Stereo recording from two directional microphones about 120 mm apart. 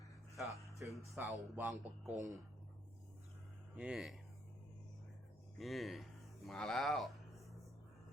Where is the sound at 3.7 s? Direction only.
10° right (ahead or behind).